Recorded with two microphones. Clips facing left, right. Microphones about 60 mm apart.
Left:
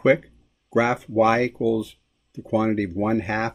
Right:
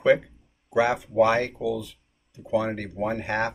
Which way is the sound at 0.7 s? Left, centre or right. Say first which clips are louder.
Left 1 dB; left.